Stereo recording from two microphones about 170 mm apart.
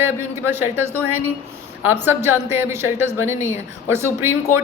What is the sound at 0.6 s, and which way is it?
Speech, 10° right (ahead or behind).